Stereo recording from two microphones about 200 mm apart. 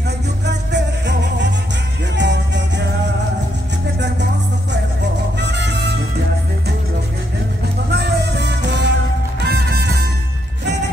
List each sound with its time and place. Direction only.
0.5 s music: 60° right (ahead or behind)
5.4 s music: 60° right (ahead or behind)
7.9 s music: 55° right (ahead or behind)